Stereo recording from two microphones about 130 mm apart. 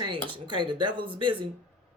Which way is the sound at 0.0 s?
40° right (ahead or behind).